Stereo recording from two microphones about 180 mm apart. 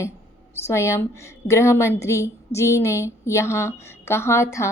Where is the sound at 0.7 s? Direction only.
15° left (ahead or behind).